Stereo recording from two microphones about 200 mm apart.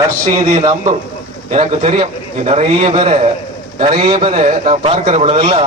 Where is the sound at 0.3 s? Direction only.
30° right (ahead or behind).